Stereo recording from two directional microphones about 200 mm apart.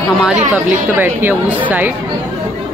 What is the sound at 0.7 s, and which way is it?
A woman's voice, 10° right (ahead or behind).